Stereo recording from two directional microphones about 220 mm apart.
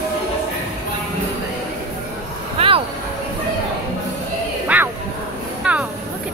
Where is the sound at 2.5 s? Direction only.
25° right (ahead or behind).